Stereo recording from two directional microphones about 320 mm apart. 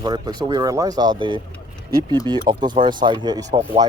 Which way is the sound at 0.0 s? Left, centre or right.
Centre.